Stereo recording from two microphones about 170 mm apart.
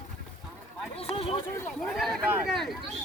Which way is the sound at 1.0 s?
35° left (ahead or behind).